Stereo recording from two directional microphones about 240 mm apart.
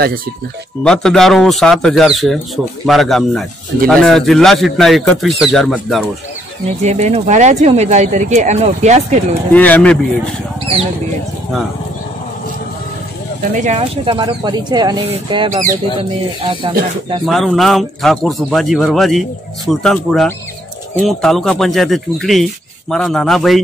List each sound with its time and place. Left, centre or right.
0.8 s speech: centre
6.8 s speech: right
9.5 s speech: centre
13.4 s speech: right
17.3 s speech: centre